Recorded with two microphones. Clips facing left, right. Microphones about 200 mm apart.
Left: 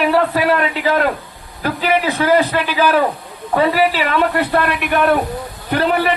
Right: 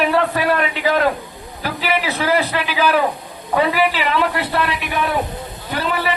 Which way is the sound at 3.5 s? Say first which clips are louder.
Left 2 dB; 40° left (ahead or behind).